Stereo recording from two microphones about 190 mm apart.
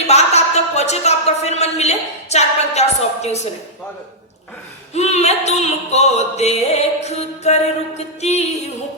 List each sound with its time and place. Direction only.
0.1 s music: 35° left (ahead or behind)
4.9 s music: 35° left (ahead or behind)